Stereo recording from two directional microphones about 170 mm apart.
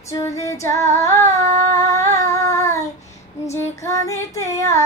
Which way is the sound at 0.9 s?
15° left (ahead or behind).